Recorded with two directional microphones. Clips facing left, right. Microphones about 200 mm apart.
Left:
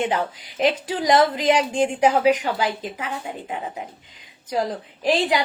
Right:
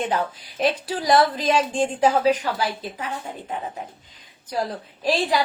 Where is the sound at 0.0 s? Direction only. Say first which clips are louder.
Left 1 dB; 15° left (ahead or behind).